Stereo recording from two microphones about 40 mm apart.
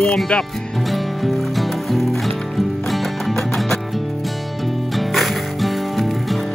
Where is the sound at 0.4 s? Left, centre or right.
Centre.